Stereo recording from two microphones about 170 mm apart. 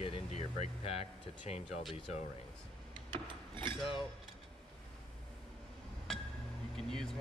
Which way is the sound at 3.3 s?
30° right (ahead or behind).